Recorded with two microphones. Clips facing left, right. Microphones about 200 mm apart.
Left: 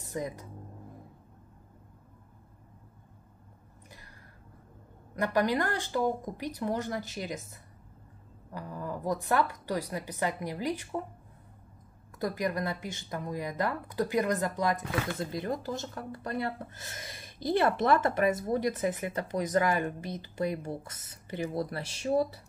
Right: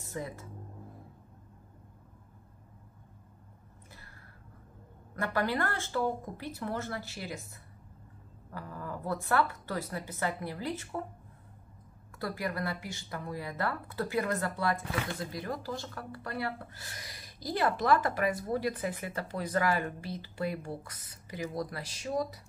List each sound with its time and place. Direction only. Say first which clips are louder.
0.1 s speech: left 4 dB; 15° left (ahead or behind)
5.1 s speech: left 4 dB; 15° left (ahead or behind)
8.5 s speech: left 3 dB; 15° left (ahead or behind)
12.2 s speech: left 4 dB; 20° left (ahead or behind)